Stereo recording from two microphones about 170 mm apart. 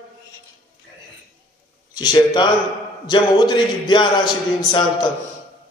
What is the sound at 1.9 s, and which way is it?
A man's voice, 25° left (ahead or behind).